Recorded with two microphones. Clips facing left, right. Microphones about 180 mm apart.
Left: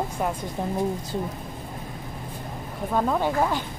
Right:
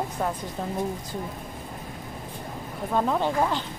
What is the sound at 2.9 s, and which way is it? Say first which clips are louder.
Speech: left 1 dB; centre (ahead or behind).